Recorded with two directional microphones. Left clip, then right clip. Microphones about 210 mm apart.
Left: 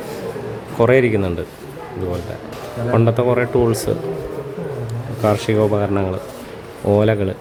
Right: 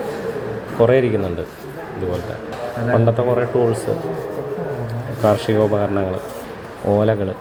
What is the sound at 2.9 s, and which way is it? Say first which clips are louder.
Speech: left 1 dB; 30° left (ahead or behind).